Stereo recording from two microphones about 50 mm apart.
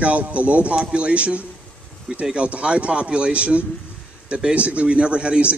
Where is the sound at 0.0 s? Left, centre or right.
Right.